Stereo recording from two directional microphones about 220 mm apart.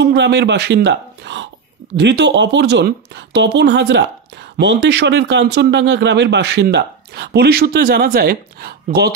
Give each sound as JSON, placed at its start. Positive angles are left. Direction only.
{"t": 0.0, "sound": "speech", "side_deg": -50}